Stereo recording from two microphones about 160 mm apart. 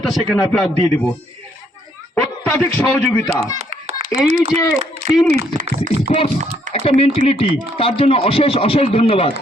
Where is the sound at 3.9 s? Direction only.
40° right (ahead or behind).